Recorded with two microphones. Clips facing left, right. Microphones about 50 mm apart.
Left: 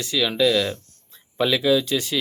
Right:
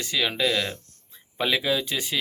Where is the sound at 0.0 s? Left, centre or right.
Right.